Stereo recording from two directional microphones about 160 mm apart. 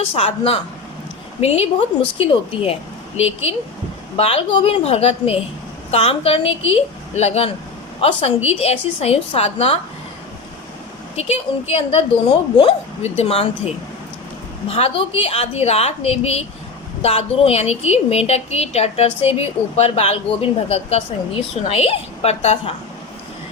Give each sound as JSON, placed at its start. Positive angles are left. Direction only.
{"t": 0.1, "sound": "a woman's voice", "side_deg": 35}
{"t": 11.2, "sound": "a woman's voice", "side_deg": 40}
{"t": 14.7, "sound": "a woman's voice", "side_deg": 35}